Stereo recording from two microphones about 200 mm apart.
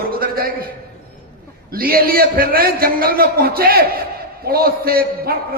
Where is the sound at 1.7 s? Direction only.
45° right (ahead or behind).